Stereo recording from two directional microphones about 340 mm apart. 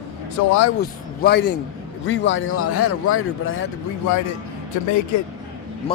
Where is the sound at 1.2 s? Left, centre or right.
Left.